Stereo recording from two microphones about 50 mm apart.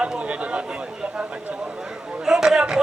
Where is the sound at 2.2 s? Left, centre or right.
Centre.